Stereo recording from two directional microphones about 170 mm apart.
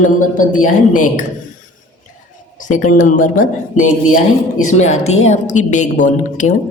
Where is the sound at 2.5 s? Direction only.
50° left (ahead or behind).